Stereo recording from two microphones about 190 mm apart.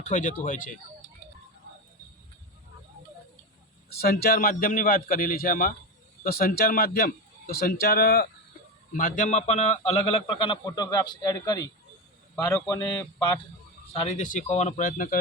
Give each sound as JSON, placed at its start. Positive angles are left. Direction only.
{"t": 0.0, "sound": "a man's voice", "side_deg": 40}
{"t": 4.1, "sound": "a man's voice", "side_deg": 50}
{"t": 9.0, "sound": "a man's voice", "side_deg": 45}
{"t": 13.9, "sound": "speech", "side_deg": 35}